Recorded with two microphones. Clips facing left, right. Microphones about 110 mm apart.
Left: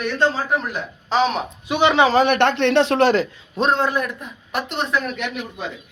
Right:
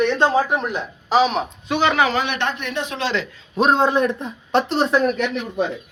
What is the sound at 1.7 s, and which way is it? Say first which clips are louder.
Speech: left 3 dB; 20° left (ahead or behind).